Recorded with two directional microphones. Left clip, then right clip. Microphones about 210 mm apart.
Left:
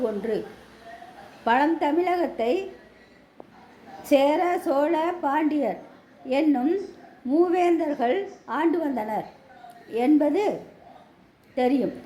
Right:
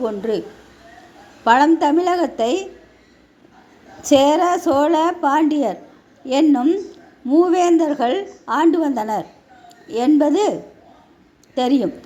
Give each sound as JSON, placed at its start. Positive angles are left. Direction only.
{"t": 0.0, "sound": "a woman's voice", "side_deg": -30}
{"t": 1.5, "sound": "a woman's voice", "side_deg": -30}
{"t": 4.0, "sound": "a woman's voice", "side_deg": -30}
{"t": 11.5, "sound": "a woman's voice", "side_deg": -30}